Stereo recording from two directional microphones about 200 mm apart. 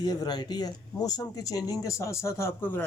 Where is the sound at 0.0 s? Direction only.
20° left (ahead or behind).